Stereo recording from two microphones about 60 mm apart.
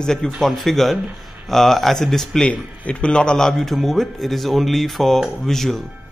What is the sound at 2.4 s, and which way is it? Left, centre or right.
A man's voice, centre.